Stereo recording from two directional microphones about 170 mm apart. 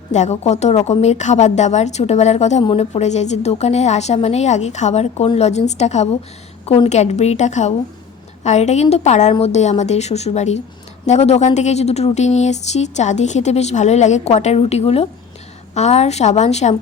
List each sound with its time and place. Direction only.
0.1 s a woman's voice: 40° left (ahead or behind)